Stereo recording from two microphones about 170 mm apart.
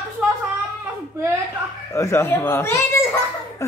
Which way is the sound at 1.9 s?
20° left (ahead or behind).